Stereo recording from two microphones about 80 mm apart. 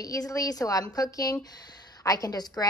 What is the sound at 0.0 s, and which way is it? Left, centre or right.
A woman's voice, left.